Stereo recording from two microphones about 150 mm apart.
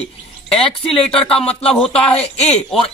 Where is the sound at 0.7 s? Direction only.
5° left (ahead or behind).